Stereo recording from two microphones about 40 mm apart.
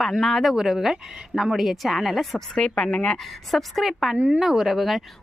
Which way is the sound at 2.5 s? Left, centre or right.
Centre.